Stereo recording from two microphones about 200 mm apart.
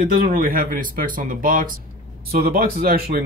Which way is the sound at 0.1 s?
45° right (ahead or behind).